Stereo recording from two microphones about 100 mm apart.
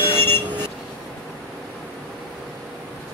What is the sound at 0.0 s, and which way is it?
Vehicle, 20° left (ahead or behind).